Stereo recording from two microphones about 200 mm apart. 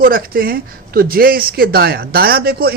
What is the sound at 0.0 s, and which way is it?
Speech, 50° right (ahead or behind).